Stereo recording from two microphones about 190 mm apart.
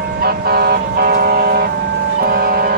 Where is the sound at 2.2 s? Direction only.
50° right (ahead or behind).